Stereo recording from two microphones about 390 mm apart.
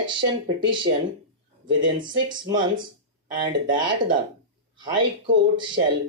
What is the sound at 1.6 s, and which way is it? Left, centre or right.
Speech, right.